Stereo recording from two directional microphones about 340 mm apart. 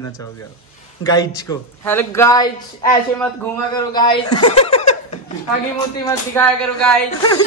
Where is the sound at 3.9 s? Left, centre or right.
Centre.